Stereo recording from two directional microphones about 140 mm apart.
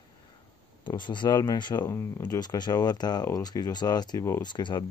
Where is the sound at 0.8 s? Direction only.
35° left (ahead or behind).